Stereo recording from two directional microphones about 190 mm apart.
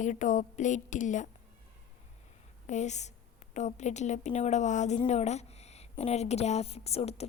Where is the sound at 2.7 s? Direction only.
40° left (ahead or behind).